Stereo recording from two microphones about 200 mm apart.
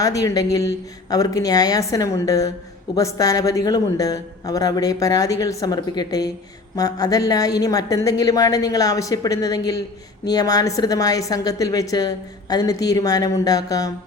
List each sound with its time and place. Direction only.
0.0 s a woman's voice: 15° left (ahead or behind)